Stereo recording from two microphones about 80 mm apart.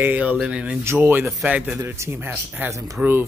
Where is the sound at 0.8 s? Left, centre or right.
Right.